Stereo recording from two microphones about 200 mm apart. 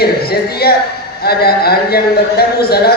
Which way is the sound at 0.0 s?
50° left (ahead or behind).